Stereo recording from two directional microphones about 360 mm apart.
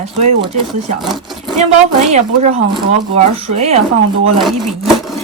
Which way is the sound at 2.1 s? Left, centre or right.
Centre.